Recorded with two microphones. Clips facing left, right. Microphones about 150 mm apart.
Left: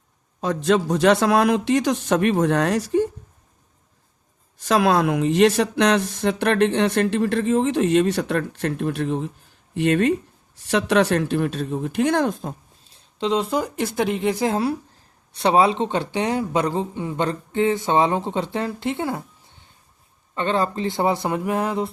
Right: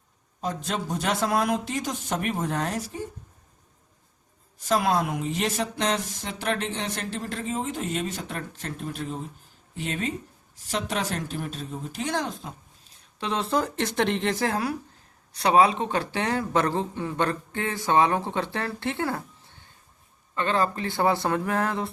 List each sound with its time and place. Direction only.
0.4 s a man's voice: 90° left
4.5 s speech: 85° left; by 12.5 s 50° left (ahead or behind)
12.9 s speech: 25° left (ahead or behind)
15.3 s speech: 25° left (ahead or behind)
20.3 s speech: 25° left (ahead or behind)